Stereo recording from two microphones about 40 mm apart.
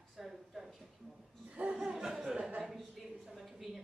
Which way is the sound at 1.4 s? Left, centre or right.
Right.